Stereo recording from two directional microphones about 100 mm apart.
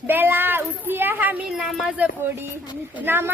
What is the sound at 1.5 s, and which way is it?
Speech, centre (ahead or behind).